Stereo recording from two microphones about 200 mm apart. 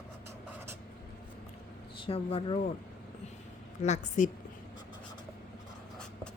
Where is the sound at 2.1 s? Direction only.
30° left (ahead or behind).